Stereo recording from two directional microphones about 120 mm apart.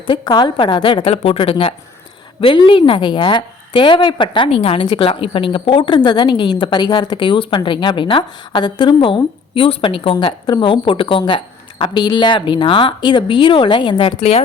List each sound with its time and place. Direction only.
0.1 s a woman's voice: 40° left (ahead or behind)